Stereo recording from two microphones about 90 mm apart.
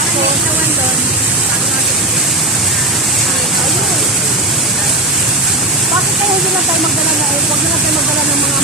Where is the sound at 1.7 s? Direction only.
Centre (ahead or behind).